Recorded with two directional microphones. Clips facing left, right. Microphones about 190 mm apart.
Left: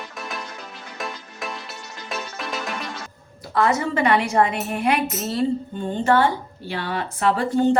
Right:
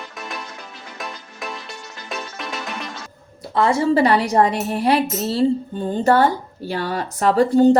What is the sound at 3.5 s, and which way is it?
A woman's voice, 30° right (ahead or behind).